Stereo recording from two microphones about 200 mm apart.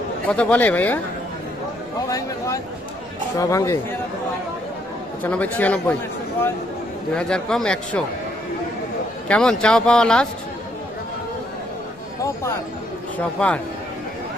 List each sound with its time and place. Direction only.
0.3 s a man's voice: 10° left (ahead or behind)
2.0 s a man's voice: 15° left (ahead or behind)
5.2 s a man's voice: 10° left (ahead or behind)
7.2 s speech: 5° left (ahead or behind)
9.3 s speech: 5° left (ahead or behind)
13.4 s a man's voice: 5° left (ahead or behind)